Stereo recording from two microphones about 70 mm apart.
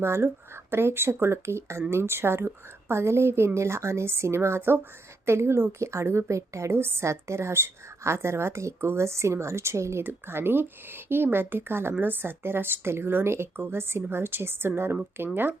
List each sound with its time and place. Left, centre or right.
0.0 s a woman's voice: right
10.0 s a woman's voice: right